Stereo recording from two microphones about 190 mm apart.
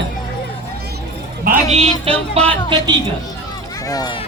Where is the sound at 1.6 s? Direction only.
30° right (ahead or behind).